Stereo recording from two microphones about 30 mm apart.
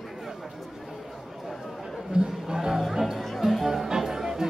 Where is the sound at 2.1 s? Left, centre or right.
Right; by 3.2 s centre.